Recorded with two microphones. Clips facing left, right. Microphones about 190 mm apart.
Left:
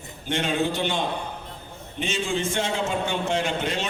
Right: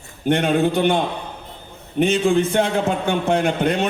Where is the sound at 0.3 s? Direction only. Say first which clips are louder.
Right 7 dB; 60° right (ahead or behind).